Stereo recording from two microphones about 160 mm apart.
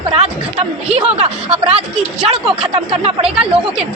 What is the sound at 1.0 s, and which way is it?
A woman's voice, 40° right (ahead or behind).